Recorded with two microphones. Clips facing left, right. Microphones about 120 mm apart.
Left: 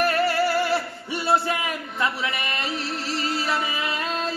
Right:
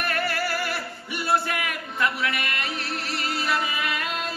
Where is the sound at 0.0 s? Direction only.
30° left (ahead or behind).